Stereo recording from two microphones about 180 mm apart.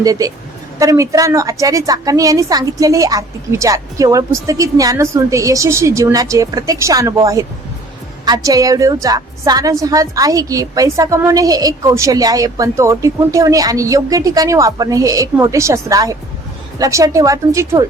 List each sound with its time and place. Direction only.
0.0 s a woman's voice: 20° right (ahead or behind)
8.2 s a woman's voice: 20° right (ahead or behind)